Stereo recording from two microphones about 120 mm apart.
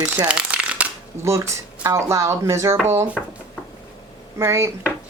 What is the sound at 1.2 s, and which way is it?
A woman's voice, 25° right (ahead or behind).